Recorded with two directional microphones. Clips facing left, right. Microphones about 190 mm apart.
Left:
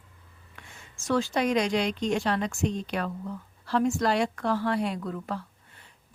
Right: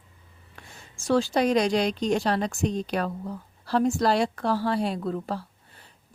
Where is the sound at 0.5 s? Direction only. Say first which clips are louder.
Right 2 dB; 35° right (ahead or behind).